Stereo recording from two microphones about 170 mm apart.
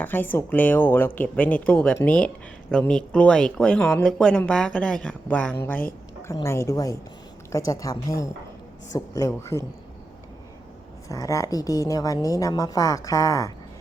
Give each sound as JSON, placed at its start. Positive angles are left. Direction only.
{"t": 0.0, "sound": "a woman's voice", "side_deg": 10}
{"t": 11.1, "sound": "a woman's voice", "side_deg": 20}